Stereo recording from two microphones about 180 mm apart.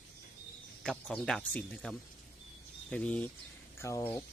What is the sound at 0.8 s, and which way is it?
Speech, 5° left (ahead or behind).